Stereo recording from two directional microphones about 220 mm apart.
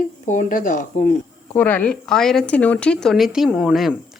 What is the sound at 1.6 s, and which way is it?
Speech, 5° left (ahead or behind).